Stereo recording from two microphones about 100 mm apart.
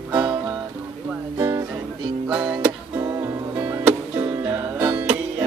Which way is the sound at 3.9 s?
15° right (ahead or behind).